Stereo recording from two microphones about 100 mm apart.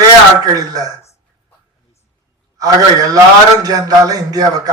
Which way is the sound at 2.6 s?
40° right (ahead or behind).